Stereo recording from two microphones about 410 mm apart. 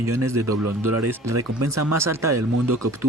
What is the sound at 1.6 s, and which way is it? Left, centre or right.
Speech, right.